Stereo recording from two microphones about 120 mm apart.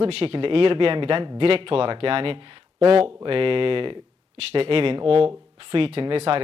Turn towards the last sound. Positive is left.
turn(degrees=-55)  # may be behind; listen again after turning